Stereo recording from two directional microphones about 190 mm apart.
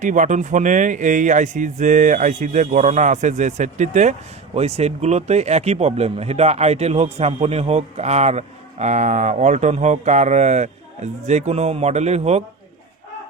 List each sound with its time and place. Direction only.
0.0 s speech: 40° right (ahead or behind)